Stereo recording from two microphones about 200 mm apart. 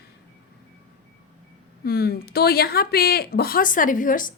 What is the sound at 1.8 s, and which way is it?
A woman's voice, 50° left (ahead or behind).